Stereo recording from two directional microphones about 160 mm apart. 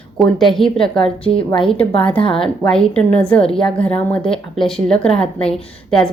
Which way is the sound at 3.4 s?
35° left (ahead or behind).